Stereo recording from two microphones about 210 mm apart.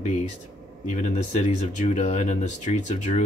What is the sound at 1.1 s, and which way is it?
Speech, 35° left (ahead or behind).